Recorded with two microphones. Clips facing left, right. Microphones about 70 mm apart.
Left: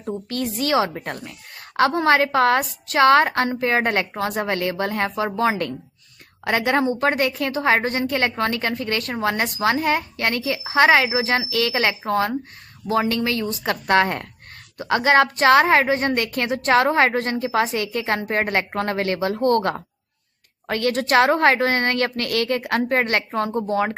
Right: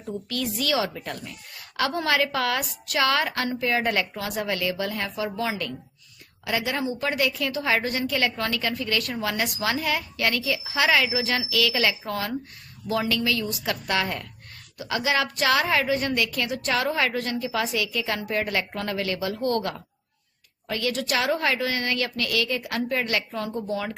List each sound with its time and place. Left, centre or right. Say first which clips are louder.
0.0 s a woman's voice: left 4 dB; left